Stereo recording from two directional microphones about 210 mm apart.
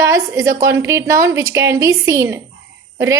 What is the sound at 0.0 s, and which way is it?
A woman's voice, 15° right (ahead or behind).